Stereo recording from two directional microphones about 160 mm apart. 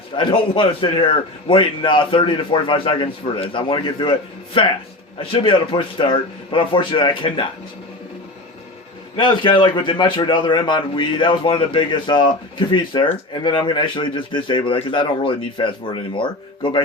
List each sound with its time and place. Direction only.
0.2 s a man's voice: 30° left (ahead or behind)
9.1 s a man's voice: 30° left (ahead or behind)